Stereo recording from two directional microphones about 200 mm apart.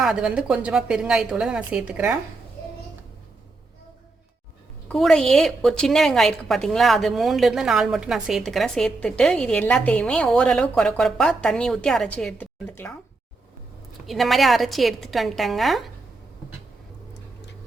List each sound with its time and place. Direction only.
0.0 s a woman's voice: 5° right (ahead or behind)
4.9 s a woman's voice: 5° left (ahead or behind)
14.1 s a woman's voice: centre (ahead or behind)